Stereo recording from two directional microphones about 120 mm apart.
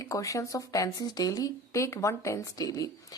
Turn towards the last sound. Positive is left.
turn(degrees=30)  # may be behind; listen again after turning